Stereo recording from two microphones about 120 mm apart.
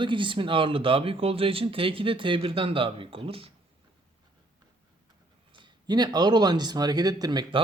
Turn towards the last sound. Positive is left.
turn(degrees=-40)  # may be behind; listen again after turning